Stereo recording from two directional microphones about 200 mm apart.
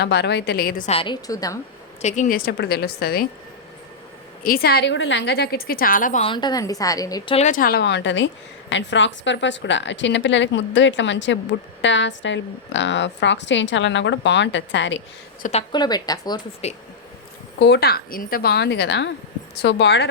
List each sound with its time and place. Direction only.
0.0 s a woman's voice: 60° left (ahead or behind)
0.9 s speech: 25° left (ahead or behind)
2.0 s a woman's voice: 35° left (ahead or behind)
4.4 s a woman's voice: 50° left (ahead or behind)
6.2 s a woman's voice: 20° left (ahead or behind)
7.3 s a woman's voice: 40° left (ahead or behind); by 15.0 s 65° left (ahead or behind)
15.4 s a woman's voice: 40° left (ahead or behind)
15.7 s speech: 20° left (ahead or behind)
16.6 s a woman's voice: 35° left (ahead or behind)
17.6 s a woman's voice: 55° left (ahead or behind)